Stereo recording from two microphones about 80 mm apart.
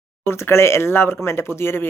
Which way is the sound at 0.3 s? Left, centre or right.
Left.